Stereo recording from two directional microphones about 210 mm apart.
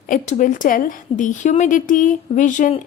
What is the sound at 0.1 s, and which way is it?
A woman's voice, 40° left (ahead or behind).